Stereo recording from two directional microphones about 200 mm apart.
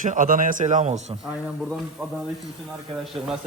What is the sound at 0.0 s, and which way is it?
A man's voice, 40° right (ahead or behind).